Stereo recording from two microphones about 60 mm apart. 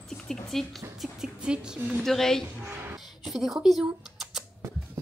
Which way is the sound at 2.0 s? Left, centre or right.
Centre.